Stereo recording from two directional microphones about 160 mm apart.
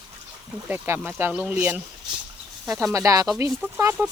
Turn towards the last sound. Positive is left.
turn(degrees=-15)  # may be behind; listen again after turning